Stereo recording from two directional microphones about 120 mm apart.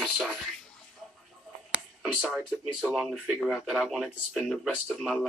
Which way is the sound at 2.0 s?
5° right (ahead or behind).